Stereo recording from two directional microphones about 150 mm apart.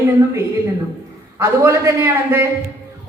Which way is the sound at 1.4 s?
20° right (ahead or behind).